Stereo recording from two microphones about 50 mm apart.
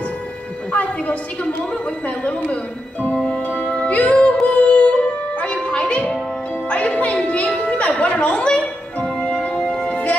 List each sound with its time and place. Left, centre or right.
0.7 s a woman's voice: left
2.5 s speech: left
3.3 s music: left